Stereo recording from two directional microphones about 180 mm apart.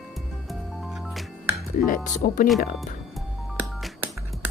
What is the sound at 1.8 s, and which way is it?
Speech, 45° left (ahead or behind).